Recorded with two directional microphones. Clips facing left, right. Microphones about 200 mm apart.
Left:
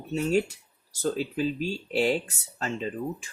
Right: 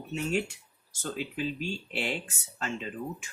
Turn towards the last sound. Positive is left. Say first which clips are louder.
# left 5 dB
turn(degrees=35)  # may be behind; listen again after turning